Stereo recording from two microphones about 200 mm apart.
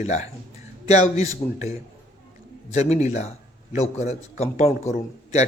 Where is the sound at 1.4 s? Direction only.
20° left (ahead or behind).